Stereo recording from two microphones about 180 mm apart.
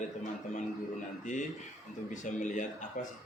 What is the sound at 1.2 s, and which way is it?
Speech, 45° left (ahead or behind).